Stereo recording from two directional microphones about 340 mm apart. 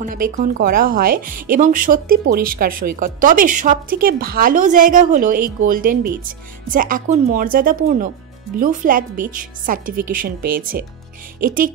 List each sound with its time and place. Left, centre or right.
0.0 s speech: right